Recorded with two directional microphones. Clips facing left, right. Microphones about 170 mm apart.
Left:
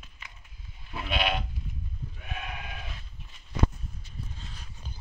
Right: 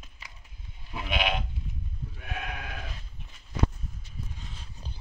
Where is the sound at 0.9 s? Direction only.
10° right (ahead or behind).